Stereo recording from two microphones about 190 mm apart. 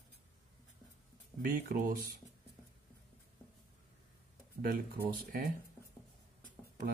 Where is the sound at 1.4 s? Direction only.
50° right (ahead or behind).